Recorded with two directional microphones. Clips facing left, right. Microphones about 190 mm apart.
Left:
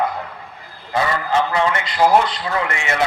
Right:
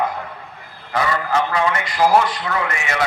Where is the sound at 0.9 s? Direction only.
25° left (ahead or behind).